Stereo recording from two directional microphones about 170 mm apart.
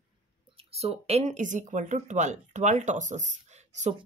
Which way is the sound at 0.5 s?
35° right (ahead or behind).